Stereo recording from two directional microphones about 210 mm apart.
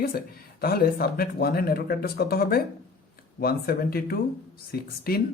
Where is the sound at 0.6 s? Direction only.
45° left (ahead or behind).